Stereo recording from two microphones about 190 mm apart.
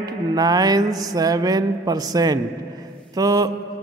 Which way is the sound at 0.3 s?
20° right (ahead or behind).